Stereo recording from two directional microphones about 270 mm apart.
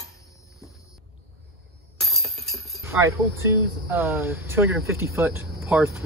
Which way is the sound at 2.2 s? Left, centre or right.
Right.